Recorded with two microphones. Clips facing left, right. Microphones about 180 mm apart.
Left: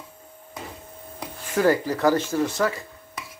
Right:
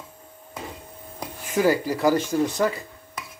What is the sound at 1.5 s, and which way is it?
Speech, 10° right (ahead or behind).